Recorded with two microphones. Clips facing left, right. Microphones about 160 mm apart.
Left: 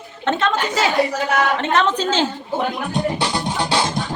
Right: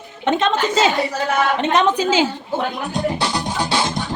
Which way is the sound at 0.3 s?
20° right (ahead or behind).